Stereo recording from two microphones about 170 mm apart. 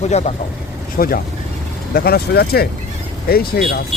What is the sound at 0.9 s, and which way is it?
Speech, 55° left (ahead or behind).